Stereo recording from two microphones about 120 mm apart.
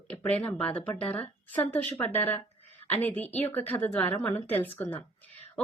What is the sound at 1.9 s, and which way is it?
A woman's voice, 15° left (ahead or behind).